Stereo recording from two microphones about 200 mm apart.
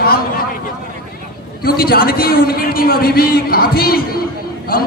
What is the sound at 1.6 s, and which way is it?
A man's voice, 50° left (ahead or behind).